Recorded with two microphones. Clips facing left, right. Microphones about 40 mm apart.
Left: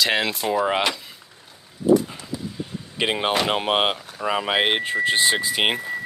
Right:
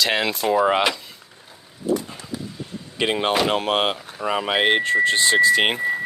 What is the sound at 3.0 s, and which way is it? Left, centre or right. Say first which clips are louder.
Speech: right 1 dB; centre.